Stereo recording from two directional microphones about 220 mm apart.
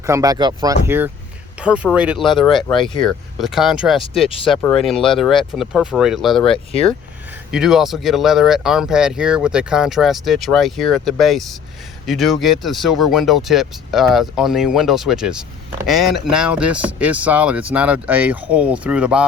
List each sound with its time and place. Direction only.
0.0 s speech: 15° right (ahead or behind); by 6.4 s centre (ahead or behind)
6.4 s speech: 25° left (ahead or behind)
7.5 s speech: centre (ahead or behind)